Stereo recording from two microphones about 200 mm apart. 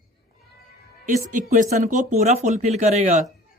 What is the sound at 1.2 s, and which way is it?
Speech, 40° right (ahead or behind).